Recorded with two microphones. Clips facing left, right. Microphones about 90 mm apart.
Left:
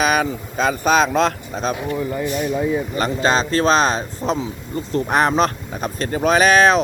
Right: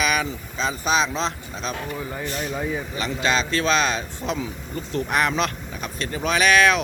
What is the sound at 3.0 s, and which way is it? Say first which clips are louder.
Speech: left 4 dB; 40° left (ahead or behind).